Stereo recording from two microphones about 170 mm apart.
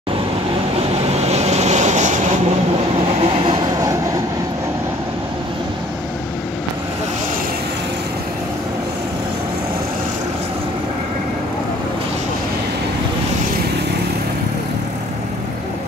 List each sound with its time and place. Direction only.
1.0 s vehicle: 40° right (ahead or behind)
3.4 s train: 25° right (ahead or behind)